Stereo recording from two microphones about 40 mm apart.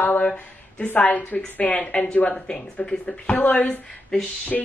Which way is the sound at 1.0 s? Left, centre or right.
Left.